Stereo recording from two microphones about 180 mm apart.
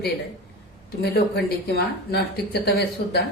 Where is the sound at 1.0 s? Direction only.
60° left (ahead or behind).